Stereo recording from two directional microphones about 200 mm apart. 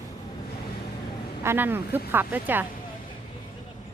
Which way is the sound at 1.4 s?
10° right (ahead or behind).